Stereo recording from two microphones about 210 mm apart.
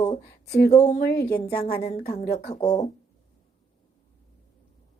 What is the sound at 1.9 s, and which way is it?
Speech, 20° left (ahead or behind).